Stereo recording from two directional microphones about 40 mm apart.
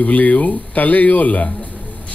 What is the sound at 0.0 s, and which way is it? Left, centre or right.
Speech, left.